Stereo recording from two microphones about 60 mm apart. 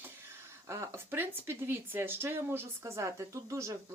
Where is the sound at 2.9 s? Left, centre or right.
Right.